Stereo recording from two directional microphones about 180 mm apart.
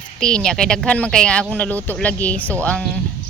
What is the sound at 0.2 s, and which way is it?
Speech, 5° left (ahead or behind).